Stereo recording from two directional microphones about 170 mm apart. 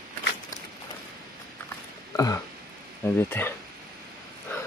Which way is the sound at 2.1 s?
15° left (ahead or behind).